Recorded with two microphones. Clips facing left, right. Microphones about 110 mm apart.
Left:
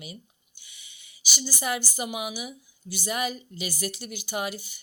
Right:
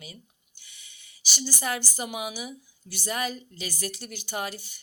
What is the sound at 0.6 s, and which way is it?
Speech, 5° left (ahead or behind).